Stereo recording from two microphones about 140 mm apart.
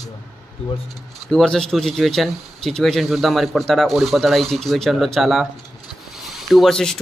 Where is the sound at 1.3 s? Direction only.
5° left (ahead or behind).